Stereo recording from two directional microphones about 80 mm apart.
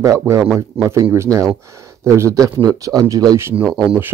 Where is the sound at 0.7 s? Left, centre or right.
Centre.